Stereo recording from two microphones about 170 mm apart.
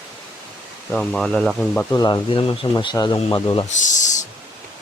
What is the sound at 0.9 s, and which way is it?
Speech, 5° left (ahead or behind).